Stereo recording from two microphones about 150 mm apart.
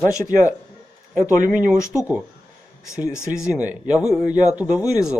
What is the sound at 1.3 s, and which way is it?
Speech, 65° right (ahead or behind).